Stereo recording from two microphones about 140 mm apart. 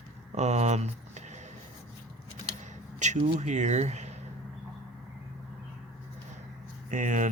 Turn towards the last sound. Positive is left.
turn(degrees=-65)  # may be behind; listen again after turning